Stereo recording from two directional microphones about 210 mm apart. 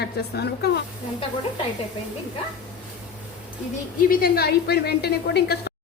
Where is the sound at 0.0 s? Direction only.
50° left (ahead or behind).